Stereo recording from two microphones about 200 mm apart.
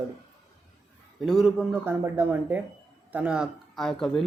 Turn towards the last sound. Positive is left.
turn(degrees=5)  # may be behind; listen again after turning